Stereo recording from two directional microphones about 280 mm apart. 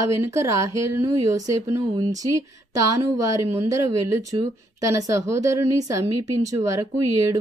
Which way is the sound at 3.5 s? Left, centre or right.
Centre.